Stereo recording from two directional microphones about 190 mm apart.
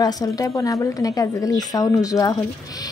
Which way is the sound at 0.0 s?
20° left (ahead or behind).